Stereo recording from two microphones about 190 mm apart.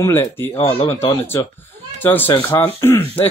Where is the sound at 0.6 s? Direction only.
30° left (ahead or behind).